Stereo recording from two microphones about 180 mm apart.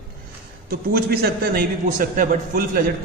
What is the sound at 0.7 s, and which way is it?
A man's voice, 60° right (ahead or behind).